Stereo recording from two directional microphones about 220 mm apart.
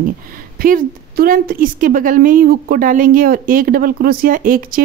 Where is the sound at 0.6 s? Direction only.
40° right (ahead or behind).